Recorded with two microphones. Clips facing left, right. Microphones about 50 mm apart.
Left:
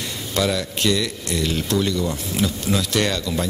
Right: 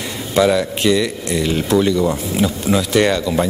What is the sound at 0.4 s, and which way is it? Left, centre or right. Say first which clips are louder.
Speech: right 7 dB; centre.